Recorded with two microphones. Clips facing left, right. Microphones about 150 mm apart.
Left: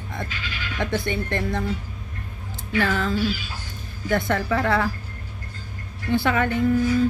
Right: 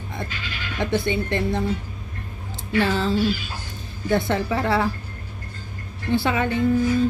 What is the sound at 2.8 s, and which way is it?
Speech, 25° right (ahead or behind).